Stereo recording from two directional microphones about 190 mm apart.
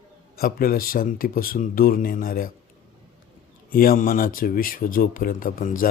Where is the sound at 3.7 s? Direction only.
50° left (ahead or behind).